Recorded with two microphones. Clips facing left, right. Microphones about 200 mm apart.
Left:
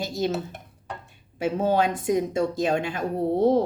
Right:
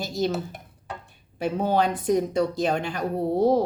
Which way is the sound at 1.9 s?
20° left (ahead or behind).